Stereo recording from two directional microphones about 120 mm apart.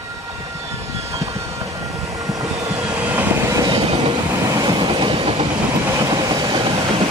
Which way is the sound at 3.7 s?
40° right (ahead or behind).